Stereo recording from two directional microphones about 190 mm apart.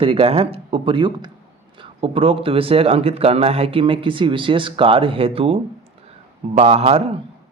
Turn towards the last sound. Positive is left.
turn(degrees=-30)  # may be behind; listen again after turning